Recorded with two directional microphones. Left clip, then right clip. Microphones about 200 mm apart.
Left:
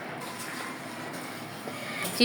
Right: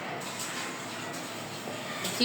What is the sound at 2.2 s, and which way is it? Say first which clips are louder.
Speech: left 4 dB; 55° left (ahead or behind).